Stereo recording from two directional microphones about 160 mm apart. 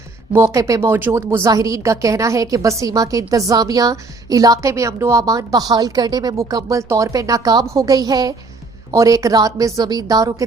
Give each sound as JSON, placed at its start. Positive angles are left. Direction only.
{"t": 0.3, "sound": "a woman's voice", "side_deg": -20}